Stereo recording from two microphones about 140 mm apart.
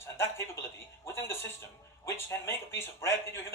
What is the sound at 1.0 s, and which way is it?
Speech, 20° left (ahead or behind).